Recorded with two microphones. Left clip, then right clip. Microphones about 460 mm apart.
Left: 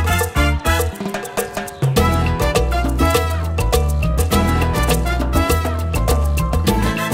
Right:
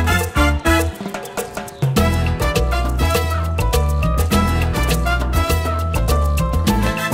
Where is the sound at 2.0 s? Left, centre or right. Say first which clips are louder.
Left 2 dB; left.